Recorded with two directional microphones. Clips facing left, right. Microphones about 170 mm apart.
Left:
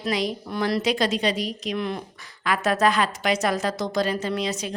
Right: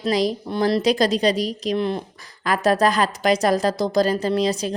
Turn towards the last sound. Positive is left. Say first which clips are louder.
# right 6 dB
turn(degrees=-35)  # may be behind; listen again after turning